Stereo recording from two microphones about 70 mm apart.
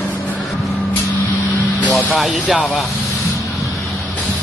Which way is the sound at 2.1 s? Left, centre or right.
Centre.